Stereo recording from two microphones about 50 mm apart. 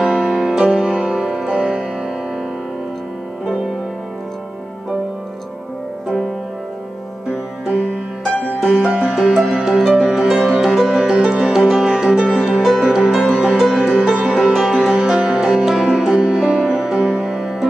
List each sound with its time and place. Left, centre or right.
0.0 s music: centre
7.6 s music: right
8.5 s music: centre
13.6 s music: centre
14.5 s music: centre
14.9 s music: centre